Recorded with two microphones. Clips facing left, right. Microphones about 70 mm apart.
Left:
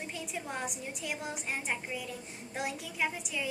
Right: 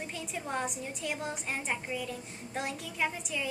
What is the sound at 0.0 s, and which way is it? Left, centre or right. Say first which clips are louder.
A woman's voice: right 1 dB; centre.